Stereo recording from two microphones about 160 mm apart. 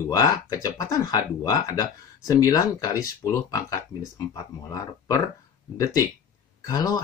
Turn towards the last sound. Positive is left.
turn(degrees=20)  # may be behind; listen again after turning